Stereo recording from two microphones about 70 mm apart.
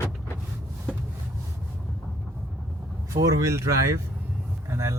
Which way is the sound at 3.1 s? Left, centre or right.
Right.